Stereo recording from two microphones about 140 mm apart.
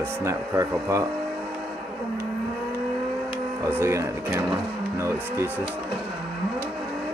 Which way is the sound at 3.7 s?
20° right (ahead or behind).